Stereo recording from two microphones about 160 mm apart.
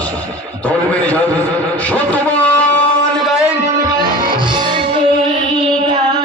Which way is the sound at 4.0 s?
30° right (ahead or behind).